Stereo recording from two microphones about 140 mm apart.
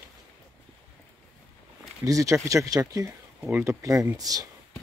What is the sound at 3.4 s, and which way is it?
Speech, 10° right (ahead or behind).